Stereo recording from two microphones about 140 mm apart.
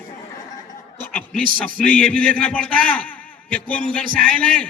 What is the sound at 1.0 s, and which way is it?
A man's voice, 10° left (ahead or behind).